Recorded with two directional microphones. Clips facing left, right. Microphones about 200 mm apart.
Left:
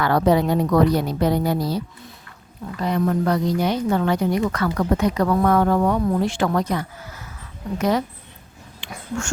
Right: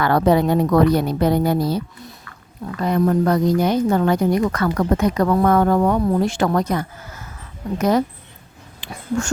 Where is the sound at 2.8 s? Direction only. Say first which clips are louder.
Right 3 dB; 45° right (ahead or behind).